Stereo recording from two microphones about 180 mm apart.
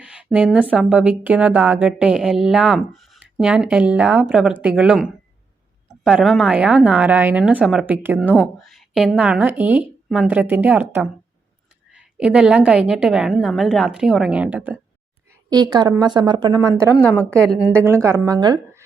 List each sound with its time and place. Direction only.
0.0 s a sound: 5° right (ahead or behind)
0.7 s a woman's voice: 10° right (ahead or behind)
8.4 s a woman's voice: centre (ahead or behind)
15.4 s a woman's voice: 20° right (ahead or behind)